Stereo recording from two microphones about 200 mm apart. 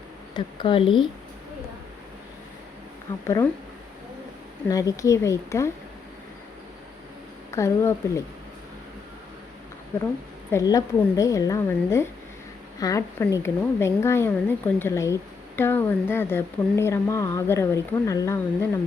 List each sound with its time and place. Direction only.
0.3 s speech: 25° left (ahead or behind)
3.2 s speech: 15° left (ahead or behind)
4.7 s speech: 15° left (ahead or behind)
7.5 s speech: 15° left (ahead or behind)
10.5 s speech: 15° left (ahead or behind)